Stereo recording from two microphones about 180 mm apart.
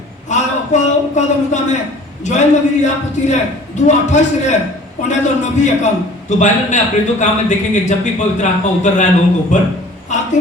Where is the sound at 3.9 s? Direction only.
40° left (ahead or behind).